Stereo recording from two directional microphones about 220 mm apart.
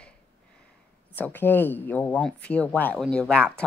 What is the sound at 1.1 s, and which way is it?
Speech, 10° left (ahead or behind).